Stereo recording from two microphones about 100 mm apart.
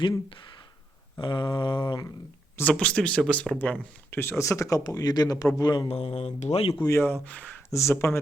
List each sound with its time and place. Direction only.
1.2 s a sound: 55° left (ahead or behind)
2.6 s speech: 15° left (ahead or behind)
3.6 s a man's voice: 20° left (ahead or behind); by 5.9 s 45° left (ahead or behind)
5.9 s speech: 90° left
6.8 s speech: 25° left (ahead or behind)
7.7 s speech: 30° left (ahead or behind)